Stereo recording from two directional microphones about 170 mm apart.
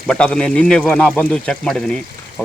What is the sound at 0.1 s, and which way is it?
Speech, 5° left (ahead or behind).